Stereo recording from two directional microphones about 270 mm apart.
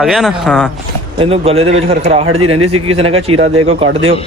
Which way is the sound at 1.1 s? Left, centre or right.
Right.